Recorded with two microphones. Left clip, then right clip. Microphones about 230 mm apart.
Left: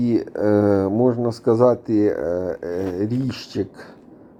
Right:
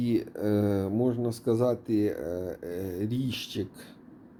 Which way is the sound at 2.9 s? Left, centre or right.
Centre.